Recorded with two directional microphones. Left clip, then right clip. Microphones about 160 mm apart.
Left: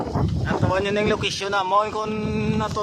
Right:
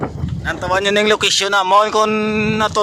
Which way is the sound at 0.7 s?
40° right (ahead or behind).